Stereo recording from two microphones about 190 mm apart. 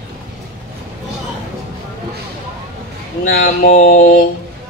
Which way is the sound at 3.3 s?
50° left (ahead or behind).